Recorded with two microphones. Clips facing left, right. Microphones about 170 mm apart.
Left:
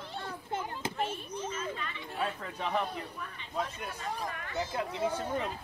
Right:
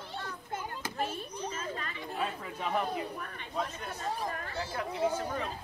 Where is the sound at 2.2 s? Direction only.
5° right (ahead or behind).